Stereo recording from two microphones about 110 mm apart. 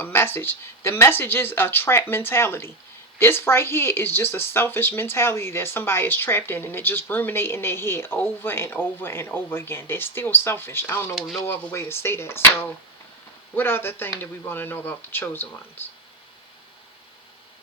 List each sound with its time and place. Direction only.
0.0 s speech: 20° left (ahead or behind)
11.2 s speech: 5° left (ahead or behind)
11.4 s speech: 20° left (ahead or behind)